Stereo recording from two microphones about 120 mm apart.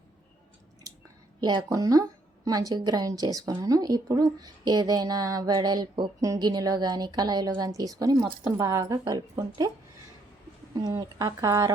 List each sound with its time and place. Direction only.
1.4 s a woman's voice: 35° right (ahead or behind)
10.9 s speech: 30° right (ahead or behind)